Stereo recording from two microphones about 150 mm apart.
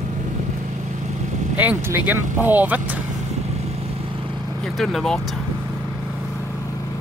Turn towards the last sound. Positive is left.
turn(degrees=0)  # may be behind; listen again after turning